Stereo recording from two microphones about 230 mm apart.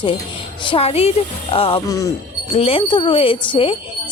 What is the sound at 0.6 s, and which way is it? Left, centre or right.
A woman's voice, left.